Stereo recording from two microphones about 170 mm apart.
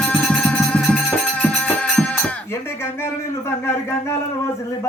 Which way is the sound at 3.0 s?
15° left (ahead or behind).